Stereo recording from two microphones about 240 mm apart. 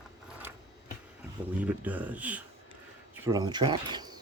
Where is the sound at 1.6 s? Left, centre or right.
Centre.